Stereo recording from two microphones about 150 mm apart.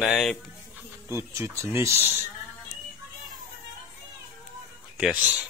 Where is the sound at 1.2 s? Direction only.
20° right (ahead or behind).